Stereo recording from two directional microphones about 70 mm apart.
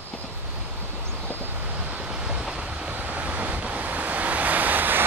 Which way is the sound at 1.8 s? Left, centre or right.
Centre.